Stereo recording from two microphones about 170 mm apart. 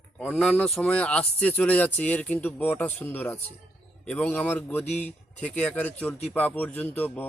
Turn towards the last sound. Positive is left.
turn(degrees=10)  # may be behind; listen again after turning